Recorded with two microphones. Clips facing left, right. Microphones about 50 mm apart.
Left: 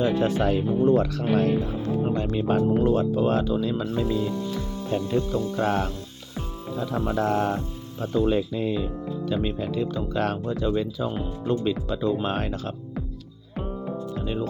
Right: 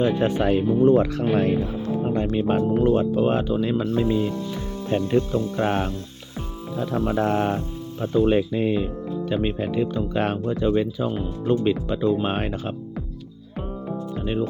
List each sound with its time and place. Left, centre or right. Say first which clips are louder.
0.0 s speech: right 2 dB; centre
2.1 s speech: right 4 dB; right
4.9 s speech: right 4 dB; right
6.9 s speech: right 4 dB; centre
7.2 s speech: even; right
14.2 s music: right 5 dB; right